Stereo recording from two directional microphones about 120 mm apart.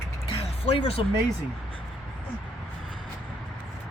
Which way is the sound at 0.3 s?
55° left (ahead or behind).